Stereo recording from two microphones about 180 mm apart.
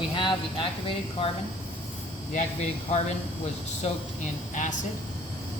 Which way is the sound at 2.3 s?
40° left (ahead or behind).